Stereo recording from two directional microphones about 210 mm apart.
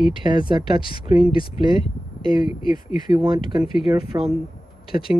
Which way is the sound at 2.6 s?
20° right (ahead or behind).